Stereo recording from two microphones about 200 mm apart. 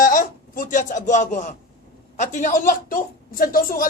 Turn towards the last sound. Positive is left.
turn(degrees=45)  # may be behind; listen again after turning